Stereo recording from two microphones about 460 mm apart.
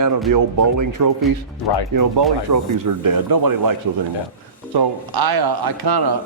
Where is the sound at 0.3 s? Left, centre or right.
Right.